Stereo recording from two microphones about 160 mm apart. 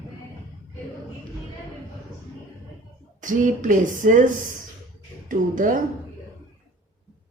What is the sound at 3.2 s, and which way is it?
Speech, 55° right (ahead or behind).